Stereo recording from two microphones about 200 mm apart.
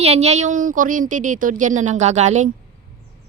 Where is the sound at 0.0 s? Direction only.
30° right (ahead or behind).